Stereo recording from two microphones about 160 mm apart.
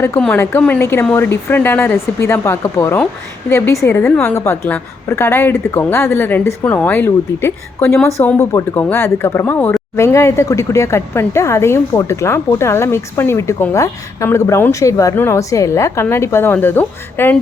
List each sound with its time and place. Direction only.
0.2 s speech: 10° left (ahead or behind)